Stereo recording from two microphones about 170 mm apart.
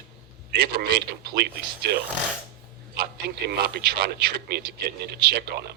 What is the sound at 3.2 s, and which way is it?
Speech, 75° right (ahead or behind).